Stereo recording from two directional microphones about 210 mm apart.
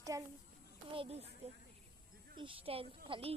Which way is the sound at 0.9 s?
25° right (ahead or behind).